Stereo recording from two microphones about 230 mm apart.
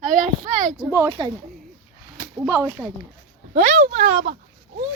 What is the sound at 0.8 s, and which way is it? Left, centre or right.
Speech, centre.